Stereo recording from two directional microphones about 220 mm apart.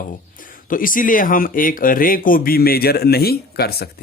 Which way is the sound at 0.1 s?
40° left (ahead or behind).